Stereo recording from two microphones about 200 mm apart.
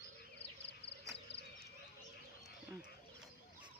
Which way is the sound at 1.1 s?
60° left (ahead or behind).